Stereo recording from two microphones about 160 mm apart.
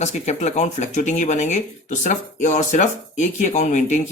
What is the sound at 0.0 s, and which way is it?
Speech, 45° left (ahead or behind).